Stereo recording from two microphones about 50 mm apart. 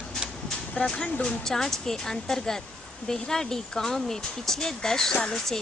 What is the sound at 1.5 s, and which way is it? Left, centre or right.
Speech, centre.